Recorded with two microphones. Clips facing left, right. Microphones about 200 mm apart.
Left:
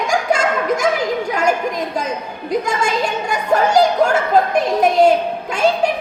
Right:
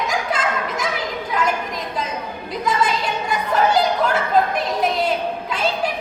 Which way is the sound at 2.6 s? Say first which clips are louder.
Right 3 dB; 45° left (ahead or behind).